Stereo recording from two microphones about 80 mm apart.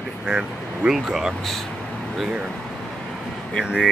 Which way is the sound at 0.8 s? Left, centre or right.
Centre.